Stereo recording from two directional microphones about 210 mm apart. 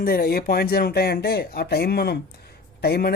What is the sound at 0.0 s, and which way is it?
Speech, 45° left (ahead or behind).